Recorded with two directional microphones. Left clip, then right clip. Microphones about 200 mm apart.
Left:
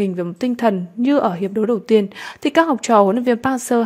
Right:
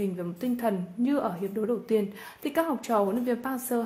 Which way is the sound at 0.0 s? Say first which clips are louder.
Left 10 dB; 45° left (ahead or behind).